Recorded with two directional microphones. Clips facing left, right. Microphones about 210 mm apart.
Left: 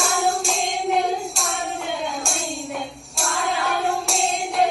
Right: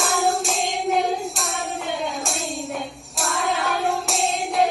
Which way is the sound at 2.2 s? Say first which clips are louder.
Even; centre (ahead or behind).